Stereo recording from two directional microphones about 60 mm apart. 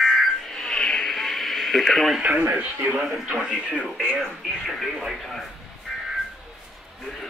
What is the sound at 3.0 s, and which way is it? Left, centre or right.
Speech, centre.